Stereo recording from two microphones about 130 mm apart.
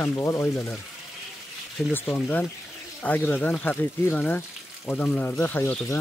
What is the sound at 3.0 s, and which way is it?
Speech, 15° left (ahead or behind).